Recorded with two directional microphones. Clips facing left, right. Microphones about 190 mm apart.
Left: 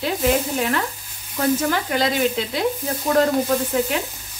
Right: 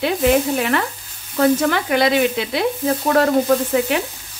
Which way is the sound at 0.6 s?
70° right (ahead or behind).